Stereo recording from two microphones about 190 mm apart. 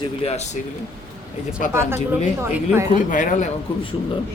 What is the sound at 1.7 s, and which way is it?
A woman's voice, 15° right (ahead or behind).